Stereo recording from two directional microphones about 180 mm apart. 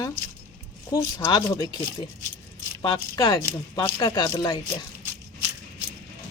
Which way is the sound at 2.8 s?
25° left (ahead or behind).